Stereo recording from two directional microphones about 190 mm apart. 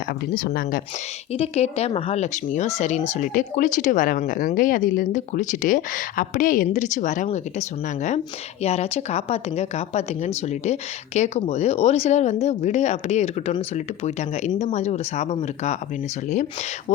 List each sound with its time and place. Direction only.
0.1 s speech: 55° left (ahead or behind)
1.3 s a woman's voice: 35° left (ahead or behind)